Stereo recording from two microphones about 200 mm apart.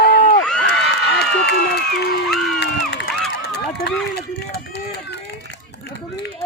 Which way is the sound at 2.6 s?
55° left (ahead or behind).